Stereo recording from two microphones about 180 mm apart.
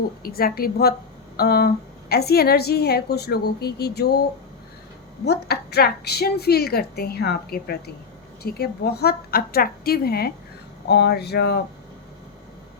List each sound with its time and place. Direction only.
0.2 s a woman's voice: 55° left (ahead or behind)
5.2 s a woman's voice: 65° left (ahead or behind)